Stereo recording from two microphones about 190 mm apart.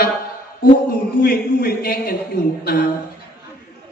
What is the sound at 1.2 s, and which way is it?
Speech, 55° left (ahead or behind).